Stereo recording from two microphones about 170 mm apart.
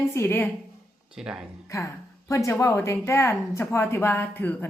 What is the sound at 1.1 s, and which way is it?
Speech, 5° right (ahead or behind).